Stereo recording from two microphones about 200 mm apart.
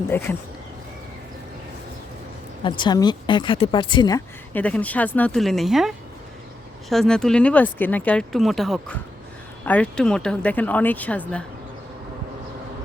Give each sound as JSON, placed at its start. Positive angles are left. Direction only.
{"t": 0.1, "sound": "speech", "side_deg": 10}
{"t": 2.6, "sound": "speech", "side_deg": 25}
{"t": 4.5, "sound": "speech", "side_deg": 5}
{"t": 6.9, "sound": "speech", "side_deg": 0}